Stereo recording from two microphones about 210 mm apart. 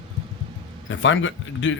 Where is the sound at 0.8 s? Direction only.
65° left (ahead or behind).